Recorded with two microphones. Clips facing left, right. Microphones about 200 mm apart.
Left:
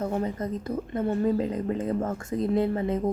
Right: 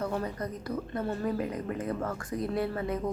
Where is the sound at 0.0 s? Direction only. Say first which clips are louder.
Left 4 dB; 20° left (ahead or behind).